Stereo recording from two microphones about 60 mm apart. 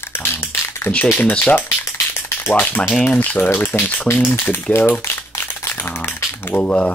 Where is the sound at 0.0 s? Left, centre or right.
Left.